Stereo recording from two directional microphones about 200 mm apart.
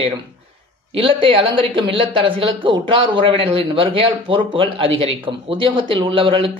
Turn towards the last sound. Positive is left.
turn(degrees=-25)  # may be behind; listen again after turning